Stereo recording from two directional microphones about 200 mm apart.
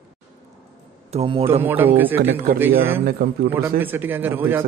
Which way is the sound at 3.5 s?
10° right (ahead or behind).